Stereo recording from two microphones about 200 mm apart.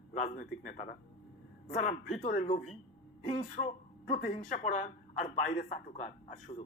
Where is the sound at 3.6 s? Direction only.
35° left (ahead or behind).